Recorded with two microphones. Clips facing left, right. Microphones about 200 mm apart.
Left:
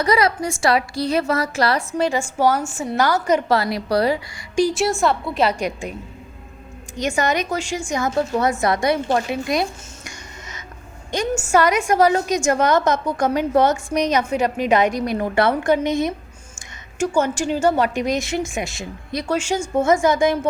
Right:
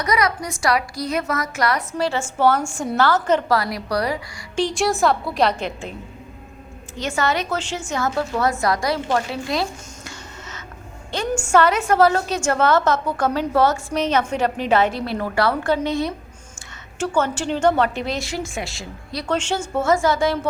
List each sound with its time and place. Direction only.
0.0 s a woman's voice: 30° left (ahead or behind); by 3.4 s 10° left (ahead or behind)
3.5 s a woman's voice: 25° left (ahead or behind)
4.5 s a woman's voice: 5° left (ahead or behind)
6.9 s a woman's voice: 15° left (ahead or behind)
19.3 s a woman's voice: 10° left (ahead or behind)